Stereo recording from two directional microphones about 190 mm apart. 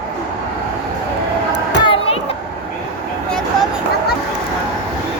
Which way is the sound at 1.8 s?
25° left (ahead or behind).